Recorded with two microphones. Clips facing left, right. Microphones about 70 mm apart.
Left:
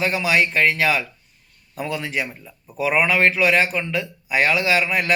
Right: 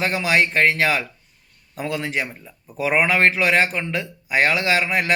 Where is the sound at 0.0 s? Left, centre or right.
Right.